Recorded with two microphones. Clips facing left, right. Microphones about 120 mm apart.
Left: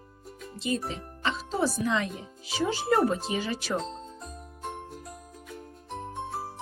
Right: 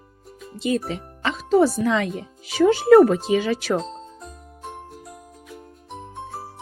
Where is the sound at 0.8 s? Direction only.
75° right (ahead or behind); by 2.0 s 90° right.